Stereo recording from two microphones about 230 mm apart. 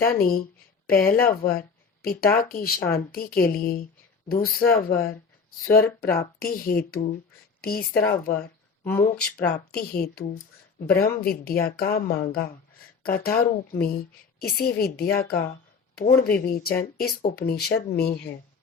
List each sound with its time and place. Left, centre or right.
0.2 s speech: left
8.8 s speech: centre
9.4 s speech: left